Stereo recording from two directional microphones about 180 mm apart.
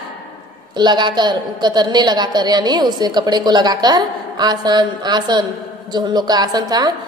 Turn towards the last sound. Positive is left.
turn(degrees=-20)  # may be behind; listen again after turning